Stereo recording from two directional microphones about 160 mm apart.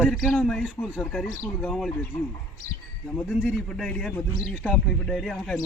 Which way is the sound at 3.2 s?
5° left (ahead or behind).